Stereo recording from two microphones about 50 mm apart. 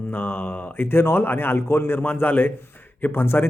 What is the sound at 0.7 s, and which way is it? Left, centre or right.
A man's voice, left.